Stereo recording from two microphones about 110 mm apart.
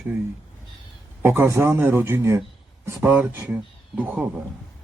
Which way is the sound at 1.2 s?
20° right (ahead or behind).